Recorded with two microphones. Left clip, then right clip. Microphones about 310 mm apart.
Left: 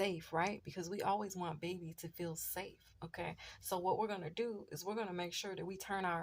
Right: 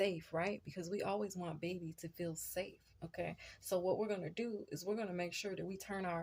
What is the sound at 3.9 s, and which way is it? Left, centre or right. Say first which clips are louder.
Speech: left 3 dB; left.